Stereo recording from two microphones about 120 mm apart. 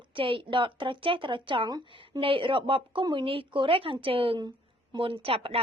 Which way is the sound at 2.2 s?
45° right (ahead or behind).